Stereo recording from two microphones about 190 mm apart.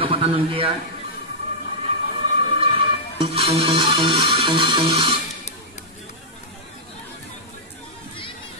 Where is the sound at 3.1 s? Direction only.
30° right (ahead or behind).